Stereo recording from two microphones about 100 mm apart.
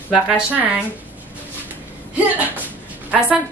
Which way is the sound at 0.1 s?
15° right (ahead or behind).